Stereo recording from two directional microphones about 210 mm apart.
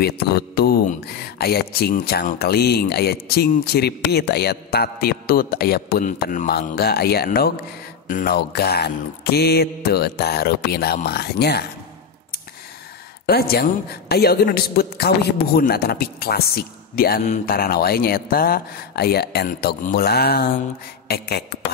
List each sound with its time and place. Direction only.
0.0 s speech: 50° left (ahead or behind)
13.3 s speech: 50° left (ahead or behind)